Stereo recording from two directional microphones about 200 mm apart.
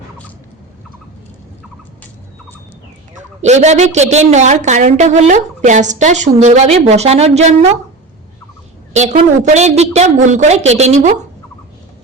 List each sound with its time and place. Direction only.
3.4 s a woman's voice: 35° right (ahead or behind)
8.9 s a woman's voice: 35° right (ahead or behind)